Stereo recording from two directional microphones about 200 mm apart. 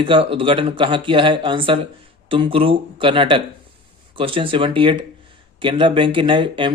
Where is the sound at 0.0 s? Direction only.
25° right (ahead or behind).